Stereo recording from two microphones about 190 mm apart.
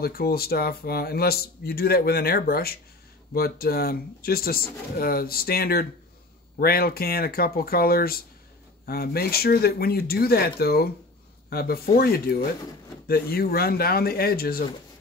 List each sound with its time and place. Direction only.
0.0 s speech: 55° left (ahead or behind)